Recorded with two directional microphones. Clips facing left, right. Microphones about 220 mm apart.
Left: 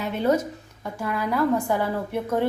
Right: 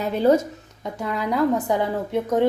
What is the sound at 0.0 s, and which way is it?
Speech, 35° right (ahead or behind).